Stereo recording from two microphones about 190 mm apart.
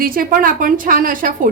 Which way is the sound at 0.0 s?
50° right (ahead or behind).